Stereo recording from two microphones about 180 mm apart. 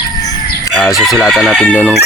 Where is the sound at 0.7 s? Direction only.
Centre (ahead or behind).